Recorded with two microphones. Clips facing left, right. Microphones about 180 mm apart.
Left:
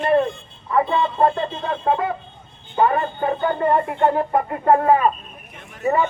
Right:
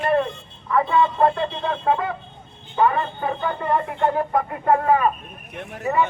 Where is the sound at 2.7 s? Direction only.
40° left (ahead or behind).